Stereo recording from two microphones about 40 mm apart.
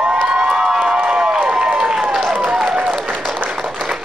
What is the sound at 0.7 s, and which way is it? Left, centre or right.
Crowd, right.